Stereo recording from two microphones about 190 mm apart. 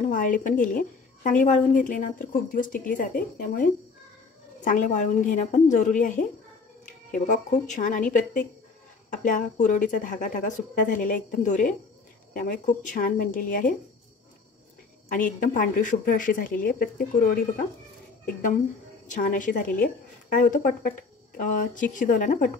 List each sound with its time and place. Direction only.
0.1 s a woman's voice: 45° left (ahead or behind)
9.1 s speech: 40° left (ahead or behind)
15.0 s speech: 45° left (ahead or behind)